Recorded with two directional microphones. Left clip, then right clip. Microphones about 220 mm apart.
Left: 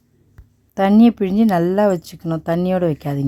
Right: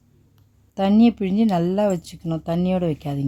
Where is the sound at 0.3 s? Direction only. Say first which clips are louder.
Left 6 dB; 20° left (ahead or behind).